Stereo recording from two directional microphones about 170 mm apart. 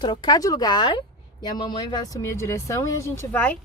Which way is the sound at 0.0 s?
25° left (ahead or behind).